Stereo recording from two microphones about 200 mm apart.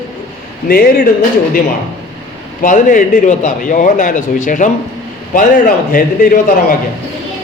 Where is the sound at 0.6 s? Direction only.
50° left (ahead or behind).